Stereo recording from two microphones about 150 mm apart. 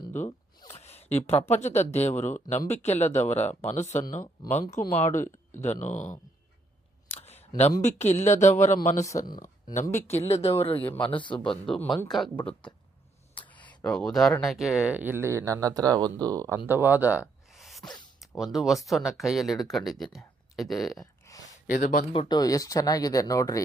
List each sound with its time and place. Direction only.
0.8 s speech: 45° left (ahead or behind)
7.1 s a sound: 45° left (ahead or behind)
7.8 s speech: 50° left (ahead or behind)
9.8 s speech: 15° left (ahead or behind)
10.2 s speech: 45° left (ahead or behind)
10.8 s speech: 10° left (ahead or behind)
13.5 s a sound: 10° left (ahead or behind)
14.4 s speech: centre (ahead or behind); by 16.6 s 25° right (ahead or behind)
16.6 s a sound: 15° right (ahead or behind)
18.2 s speech: centre (ahead or behind)
21.2 s a sound: 25° left (ahead or behind)
21.7 s speech: 65° left (ahead or behind)
22.1 s speech: 30° left (ahead or behind)